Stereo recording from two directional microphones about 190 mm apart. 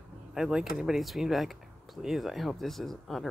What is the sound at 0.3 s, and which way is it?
Speech, 5° right (ahead or behind).